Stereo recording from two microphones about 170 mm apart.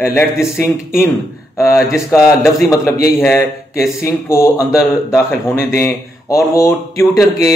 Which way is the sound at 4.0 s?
15° left (ahead or behind).